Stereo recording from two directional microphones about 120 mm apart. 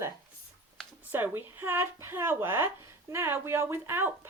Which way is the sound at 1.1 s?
15° right (ahead or behind).